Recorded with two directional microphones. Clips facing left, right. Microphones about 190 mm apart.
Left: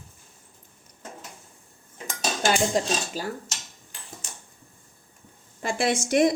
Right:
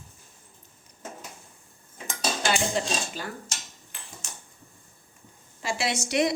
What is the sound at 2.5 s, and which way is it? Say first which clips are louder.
Cutlery: left 4 dB; 40° left (ahead or behind).